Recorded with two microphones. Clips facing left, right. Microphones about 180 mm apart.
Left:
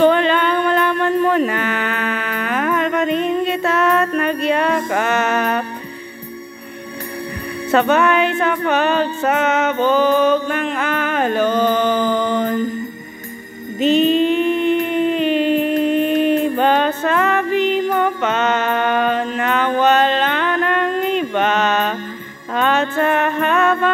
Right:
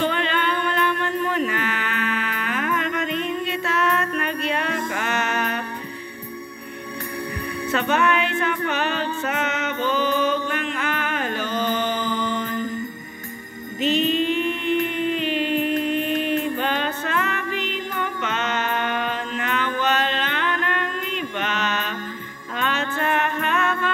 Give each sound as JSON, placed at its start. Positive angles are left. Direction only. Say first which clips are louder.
{"t": 0.0, "sound": "music", "louder": "left 9 dB", "side_deg": 45}
{"t": 7.7, "sound": "music", "louder": "left 7 dB", "side_deg": 50}
{"t": 13.7, "sound": "music", "louder": "left 7 dB", "side_deg": 45}